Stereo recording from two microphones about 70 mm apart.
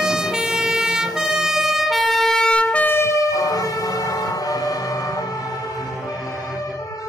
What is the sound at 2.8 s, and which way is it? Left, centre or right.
Vehicle, left.